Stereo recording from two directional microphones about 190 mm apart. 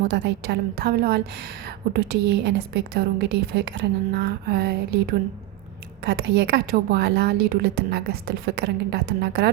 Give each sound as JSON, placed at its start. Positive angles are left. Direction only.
{"t": 0.1, "sound": "a woman's voice", "side_deg": -65}
{"t": 6.1, "sound": "a woman's voice", "side_deg": -65}